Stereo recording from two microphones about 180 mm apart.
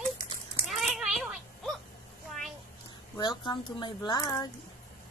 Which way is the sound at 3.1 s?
25° left (ahead or behind).